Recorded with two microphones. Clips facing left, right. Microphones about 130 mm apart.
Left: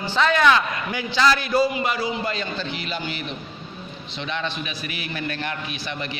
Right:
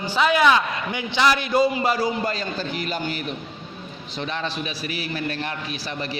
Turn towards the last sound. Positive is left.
turn(degrees=-35)  # may be behind; listen again after turning